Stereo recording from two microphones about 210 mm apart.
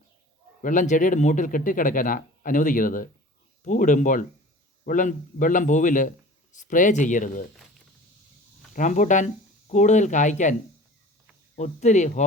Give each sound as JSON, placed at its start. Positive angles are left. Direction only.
{"t": 0.6, "sound": "a man's voice", "side_deg": 35}
{"t": 8.7, "sound": "a man's voice", "side_deg": 35}
{"t": 11.5, "sound": "a man's voice", "side_deg": 35}